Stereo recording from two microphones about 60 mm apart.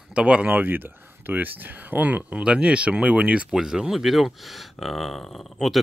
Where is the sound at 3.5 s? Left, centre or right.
Centre.